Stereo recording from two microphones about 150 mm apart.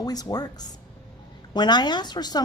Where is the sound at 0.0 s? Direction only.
25° left (ahead or behind).